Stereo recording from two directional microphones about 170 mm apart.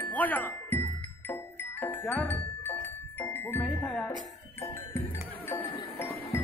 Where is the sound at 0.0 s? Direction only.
10° left (ahead or behind).